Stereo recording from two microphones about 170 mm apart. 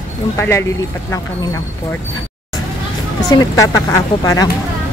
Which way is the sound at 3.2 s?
20° left (ahead or behind).